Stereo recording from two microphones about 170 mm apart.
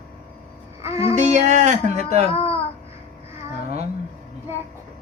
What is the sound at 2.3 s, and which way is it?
Speech, 35° left (ahead or behind).